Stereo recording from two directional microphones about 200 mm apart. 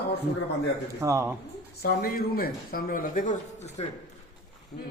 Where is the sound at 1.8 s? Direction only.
50° left (ahead or behind).